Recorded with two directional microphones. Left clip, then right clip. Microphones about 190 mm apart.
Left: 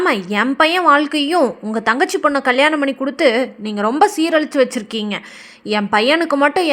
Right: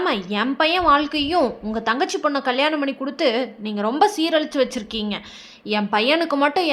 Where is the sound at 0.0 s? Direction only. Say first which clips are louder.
Left 5 dB; 25° left (ahead or behind).